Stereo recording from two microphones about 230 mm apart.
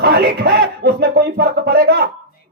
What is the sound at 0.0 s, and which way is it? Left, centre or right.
A man's voice, right.